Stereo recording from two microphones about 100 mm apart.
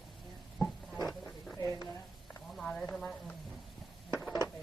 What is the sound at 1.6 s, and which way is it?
Speech, 30° left (ahead or behind).